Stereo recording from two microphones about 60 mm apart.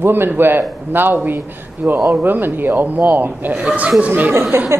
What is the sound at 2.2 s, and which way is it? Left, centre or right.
A woman's voice, right.